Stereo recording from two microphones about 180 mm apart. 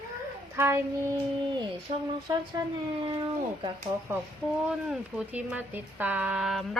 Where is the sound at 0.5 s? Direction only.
15° right (ahead or behind).